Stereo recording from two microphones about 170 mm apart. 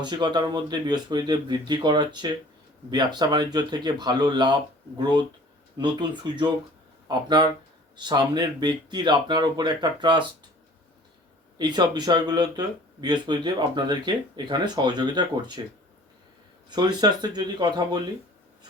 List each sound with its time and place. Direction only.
0.0 s speech: 25° right (ahead or behind)
11.5 s speech: 25° right (ahead or behind)
16.6 s speech: 25° right (ahead or behind)